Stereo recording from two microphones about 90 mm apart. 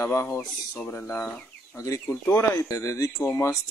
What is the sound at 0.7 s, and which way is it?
Speech, 15° left (ahead or behind).